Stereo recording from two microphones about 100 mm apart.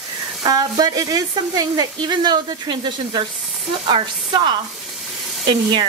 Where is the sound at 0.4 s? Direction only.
40° right (ahead or behind).